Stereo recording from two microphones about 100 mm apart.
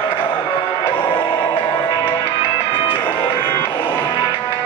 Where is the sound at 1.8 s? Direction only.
55° left (ahead or behind).